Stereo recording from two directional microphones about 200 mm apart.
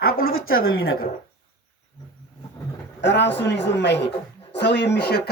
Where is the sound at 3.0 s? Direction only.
60° left (ahead or behind).